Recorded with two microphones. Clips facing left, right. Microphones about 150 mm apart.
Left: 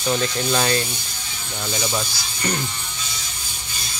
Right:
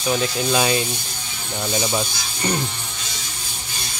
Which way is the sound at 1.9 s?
15° right (ahead or behind).